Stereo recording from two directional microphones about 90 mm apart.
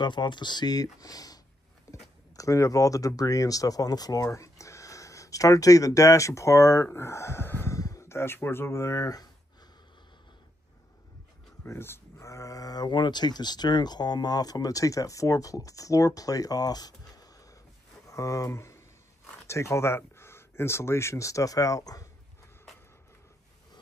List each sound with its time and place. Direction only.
0.0 s speech: 55° left (ahead or behind)
1.9 s a sound: 40° left (ahead or behind)
2.3 s speech: 35° left (ahead or behind)
7.7 s speech: 40° left (ahead or behind)
11.6 s speech: 30° left (ahead or behind)